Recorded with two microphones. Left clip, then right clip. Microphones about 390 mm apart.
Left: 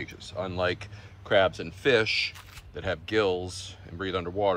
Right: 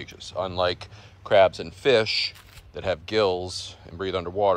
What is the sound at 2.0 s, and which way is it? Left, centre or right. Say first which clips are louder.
Speech: right 1 dB; right.